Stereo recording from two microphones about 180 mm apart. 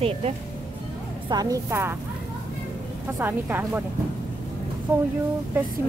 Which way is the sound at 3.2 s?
10° right (ahead or behind).